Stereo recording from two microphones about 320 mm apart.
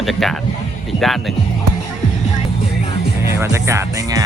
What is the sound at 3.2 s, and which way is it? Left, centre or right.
Speech, centre.